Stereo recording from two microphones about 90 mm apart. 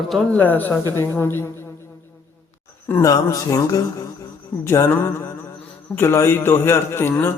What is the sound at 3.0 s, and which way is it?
A man's voice, 35° left (ahead or behind).